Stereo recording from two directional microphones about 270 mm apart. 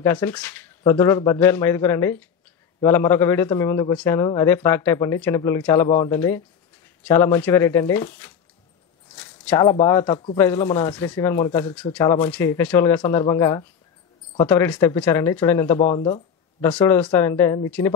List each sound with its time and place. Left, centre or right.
0.0 s a man's voice: centre
15.8 s speech: left
16.7 s a man's voice: centre